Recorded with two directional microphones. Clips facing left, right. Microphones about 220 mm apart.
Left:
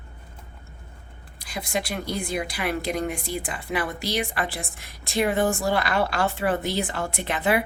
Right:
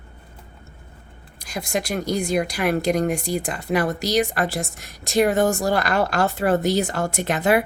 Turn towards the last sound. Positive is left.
turn(degrees=-45)  # may be behind; listen again after turning